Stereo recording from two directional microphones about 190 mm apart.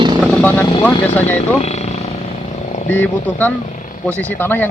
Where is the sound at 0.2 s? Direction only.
5° left (ahead or behind).